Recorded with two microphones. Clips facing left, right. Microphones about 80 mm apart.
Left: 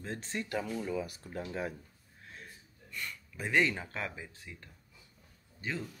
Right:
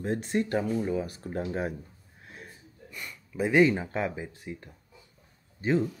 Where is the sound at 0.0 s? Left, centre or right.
Centre.